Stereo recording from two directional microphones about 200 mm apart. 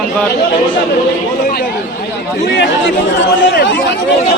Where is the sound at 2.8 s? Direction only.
65° left (ahead or behind).